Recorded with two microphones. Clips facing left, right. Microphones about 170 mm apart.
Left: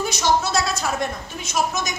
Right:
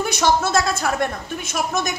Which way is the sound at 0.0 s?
55° right (ahead or behind).